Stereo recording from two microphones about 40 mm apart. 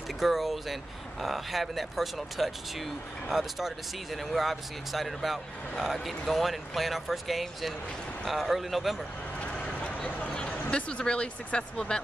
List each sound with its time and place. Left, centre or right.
0.2 s speech: centre
9.8 s a sound: left
10.7 s speech: left